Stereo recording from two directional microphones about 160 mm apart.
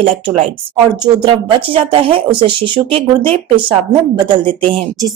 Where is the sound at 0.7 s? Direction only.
30° right (ahead or behind).